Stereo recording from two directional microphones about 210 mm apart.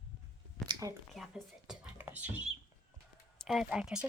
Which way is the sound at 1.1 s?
5° right (ahead or behind).